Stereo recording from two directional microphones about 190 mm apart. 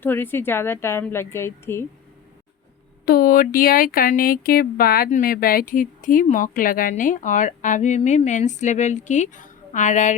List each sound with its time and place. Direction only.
0.0 s a woman's voice: 10° left (ahead or behind)
3.1 s speech: 50° left (ahead or behind)